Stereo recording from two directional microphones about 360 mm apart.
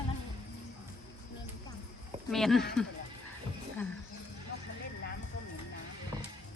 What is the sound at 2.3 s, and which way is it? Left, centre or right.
Speech, centre.